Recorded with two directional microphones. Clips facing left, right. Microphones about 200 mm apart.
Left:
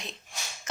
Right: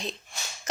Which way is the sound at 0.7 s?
35° right (ahead or behind).